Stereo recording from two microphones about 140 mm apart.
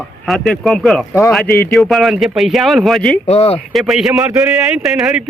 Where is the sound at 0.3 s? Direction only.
5° left (ahead or behind).